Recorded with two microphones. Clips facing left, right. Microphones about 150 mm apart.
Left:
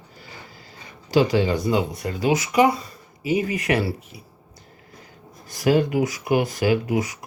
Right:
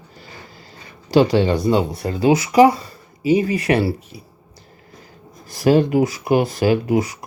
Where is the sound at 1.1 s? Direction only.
35° right (ahead or behind).